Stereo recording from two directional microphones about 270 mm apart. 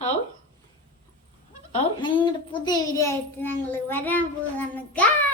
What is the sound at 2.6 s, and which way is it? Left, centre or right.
A child's voice, centre.